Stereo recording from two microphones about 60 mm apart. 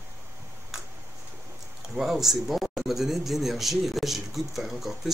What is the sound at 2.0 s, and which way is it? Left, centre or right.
Speech, centre.